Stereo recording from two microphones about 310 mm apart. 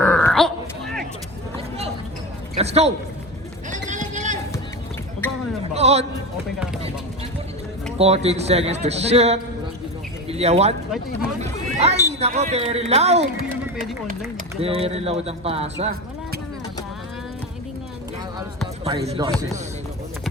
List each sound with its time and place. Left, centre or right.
0.0 s a sound: centre
2.6 s speech: right
3.7 s a sound: right
5.7 s speech: centre
7.9 s speech: centre
19.0 s speech: centre